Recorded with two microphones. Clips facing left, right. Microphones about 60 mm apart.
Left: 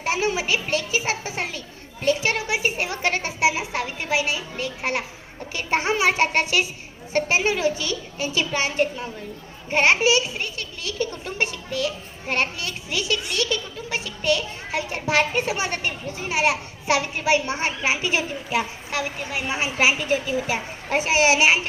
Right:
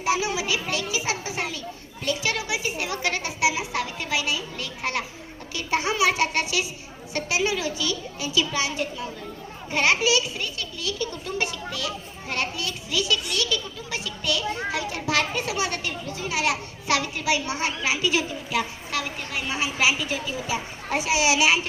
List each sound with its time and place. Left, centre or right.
0.0 s a child's voice: left
2.0 s a sound: left
5.5 s a child's voice: left